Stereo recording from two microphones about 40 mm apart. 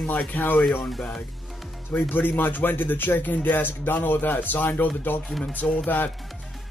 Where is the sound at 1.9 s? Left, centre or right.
Left.